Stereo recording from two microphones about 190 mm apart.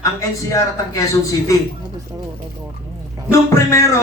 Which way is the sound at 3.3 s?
15° left (ahead or behind).